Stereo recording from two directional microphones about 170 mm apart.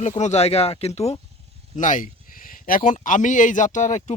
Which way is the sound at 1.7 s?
50° left (ahead or behind).